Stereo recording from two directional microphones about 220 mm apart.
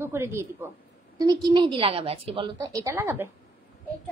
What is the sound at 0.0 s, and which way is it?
A woman's voice, 10° right (ahead or behind).